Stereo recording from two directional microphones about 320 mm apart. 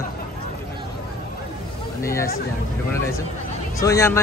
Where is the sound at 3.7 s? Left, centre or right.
Centre.